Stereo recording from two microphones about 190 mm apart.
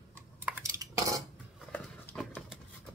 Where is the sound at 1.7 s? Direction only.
10° left (ahead or behind).